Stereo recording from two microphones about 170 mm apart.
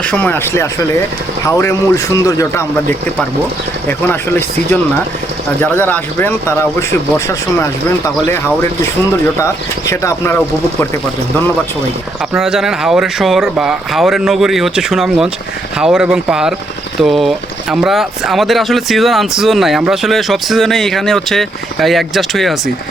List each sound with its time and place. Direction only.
0.0 s speech: 10° left (ahead or behind)
3.8 s speech: 10° left (ahead or behind)
9.4 s speech: 15° left (ahead or behind)
12.3 s speech: centre (ahead or behind)